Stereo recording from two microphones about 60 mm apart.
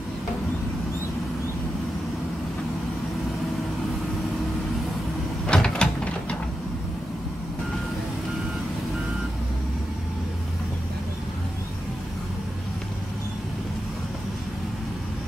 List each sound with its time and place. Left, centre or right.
5.5 s mechanisms: centre